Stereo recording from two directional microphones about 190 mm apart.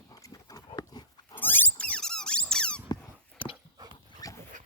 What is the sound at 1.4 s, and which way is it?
Squeak, 10° left (ahead or behind).